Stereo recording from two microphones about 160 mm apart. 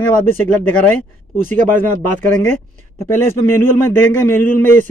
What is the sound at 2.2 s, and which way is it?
A man's voice, 15° left (ahead or behind).